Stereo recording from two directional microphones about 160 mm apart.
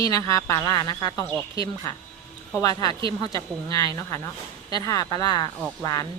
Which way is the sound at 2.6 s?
25° left (ahead or behind).